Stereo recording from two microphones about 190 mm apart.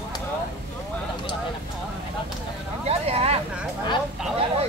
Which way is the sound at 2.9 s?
30° right (ahead or behind).